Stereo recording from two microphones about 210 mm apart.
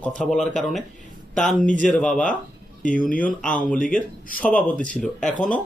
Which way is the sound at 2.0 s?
5° left (ahead or behind).